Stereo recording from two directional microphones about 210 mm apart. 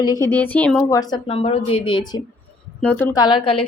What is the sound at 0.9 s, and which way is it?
Speech, 20° left (ahead or behind).